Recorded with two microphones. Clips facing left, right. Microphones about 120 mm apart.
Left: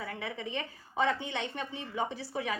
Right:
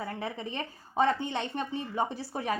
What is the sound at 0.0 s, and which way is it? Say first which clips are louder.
A woman's voice: right 3 dB; 40° right (ahead or behind).